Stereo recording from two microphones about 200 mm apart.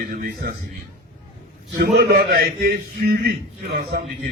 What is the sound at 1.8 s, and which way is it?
A man's voice, 50° right (ahead or behind).